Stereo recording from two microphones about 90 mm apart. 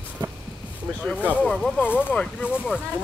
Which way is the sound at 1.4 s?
5° left (ahead or behind).